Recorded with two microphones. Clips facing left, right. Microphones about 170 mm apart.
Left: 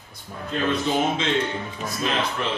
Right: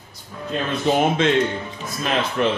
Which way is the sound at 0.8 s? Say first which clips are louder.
Right 5 dB; 55° right (ahead or behind).